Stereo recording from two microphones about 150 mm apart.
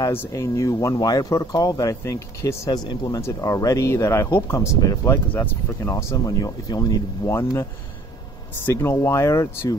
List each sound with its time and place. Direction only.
0.0 s speech: 20° left (ahead or behind)
8.6 s speech: 15° left (ahead or behind)